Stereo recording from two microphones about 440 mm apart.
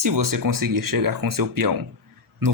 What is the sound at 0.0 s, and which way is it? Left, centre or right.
Speech, right.